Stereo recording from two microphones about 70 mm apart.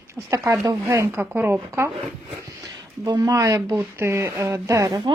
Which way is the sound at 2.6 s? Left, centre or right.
Right.